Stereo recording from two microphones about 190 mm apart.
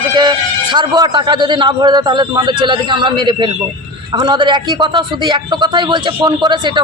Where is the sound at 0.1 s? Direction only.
25° right (ahead or behind).